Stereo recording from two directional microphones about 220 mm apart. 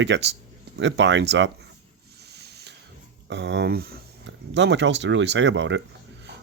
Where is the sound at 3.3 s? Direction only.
50° right (ahead or behind).